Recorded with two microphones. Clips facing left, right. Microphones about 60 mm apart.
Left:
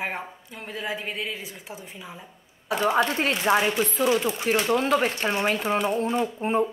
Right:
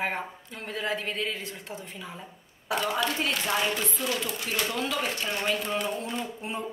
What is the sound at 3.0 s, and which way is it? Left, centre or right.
Speech, left.